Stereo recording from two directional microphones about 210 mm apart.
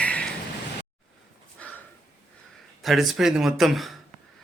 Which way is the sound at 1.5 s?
5° left (ahead or behind).